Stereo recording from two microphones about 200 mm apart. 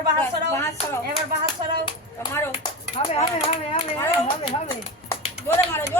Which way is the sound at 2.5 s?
30° left (ahead or behind).